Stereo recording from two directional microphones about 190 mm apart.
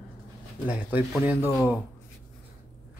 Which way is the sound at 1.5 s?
Centre (ahead or behind).